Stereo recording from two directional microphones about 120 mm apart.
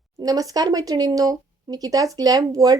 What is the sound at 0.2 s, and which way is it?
Speech, 30° right (ahead or behind).